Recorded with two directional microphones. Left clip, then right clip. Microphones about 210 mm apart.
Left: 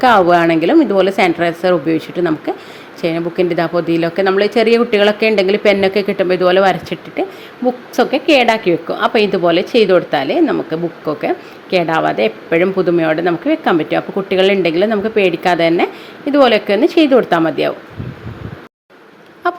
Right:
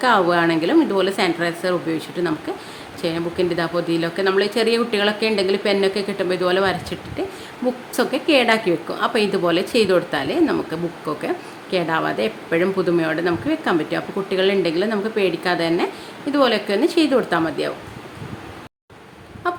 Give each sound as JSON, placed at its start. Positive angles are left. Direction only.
{"t": 0.0, "sound": "a woman's voice", "side_deg": 25}
{"t": 19.4, "sound": "a woman's voice", "side_deg": 30}